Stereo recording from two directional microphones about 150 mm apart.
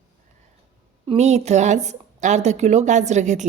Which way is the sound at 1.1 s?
50° right (ahead or behind).